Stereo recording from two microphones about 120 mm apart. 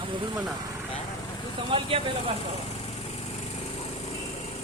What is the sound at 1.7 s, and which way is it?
Speech, 45° right (ahead or behind).